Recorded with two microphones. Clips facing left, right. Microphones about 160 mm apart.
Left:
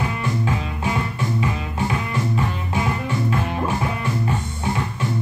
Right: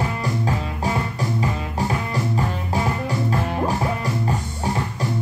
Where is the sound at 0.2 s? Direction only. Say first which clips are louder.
Even; 35° right (ahead or behind).